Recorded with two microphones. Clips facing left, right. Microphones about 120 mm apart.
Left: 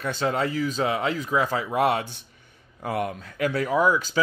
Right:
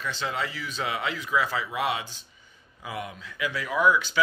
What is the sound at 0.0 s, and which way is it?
Speech, 45° left (ahead or behind).